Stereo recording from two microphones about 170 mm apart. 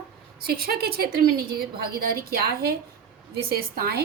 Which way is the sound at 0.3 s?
65° right (ahead or behind).